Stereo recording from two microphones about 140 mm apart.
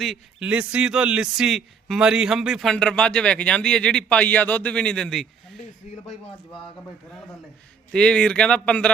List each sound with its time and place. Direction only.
0.0 s speech: centre (ahead or behind)
5.8 s speech: 60° left (ahead or behind)
7.9 s speech: 5° left (ahead or behind)